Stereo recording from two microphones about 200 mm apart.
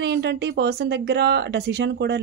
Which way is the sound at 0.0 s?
60° right (ahead or behind).